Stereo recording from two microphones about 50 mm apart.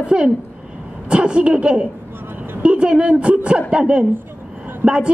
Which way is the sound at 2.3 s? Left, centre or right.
Right.